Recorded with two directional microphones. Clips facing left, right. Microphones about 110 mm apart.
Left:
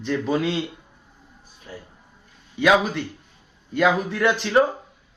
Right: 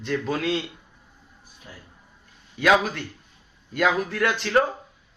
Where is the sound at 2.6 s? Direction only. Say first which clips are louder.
Left 2 dB; centre (ahead or behind).